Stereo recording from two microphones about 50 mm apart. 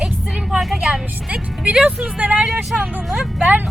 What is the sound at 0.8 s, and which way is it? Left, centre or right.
Speech, centre.